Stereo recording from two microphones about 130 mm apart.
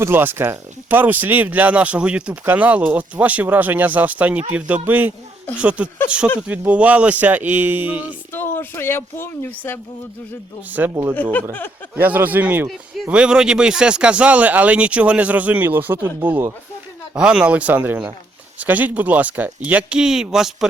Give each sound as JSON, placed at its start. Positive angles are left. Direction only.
{"t": 0.0, "sound": "speech", "side_deg": -15}
{"t": 8.3, "sound": "speech", "side_deg": 15}
{"t": 10.7, "sound": "speech", "side_deg": -15}
{"t": 11.1, "sound": "speech", "side_deg": 15}
{"t": 11.9, "sound": "speech", "side_deg": -15}